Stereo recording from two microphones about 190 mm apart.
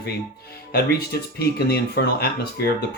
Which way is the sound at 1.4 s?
55° left (ahead or behind).